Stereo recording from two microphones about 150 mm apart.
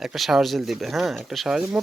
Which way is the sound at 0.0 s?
Centre (ahead or behind).